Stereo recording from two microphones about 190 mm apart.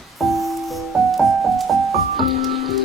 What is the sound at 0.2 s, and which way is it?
Music, centre (ahead or behind).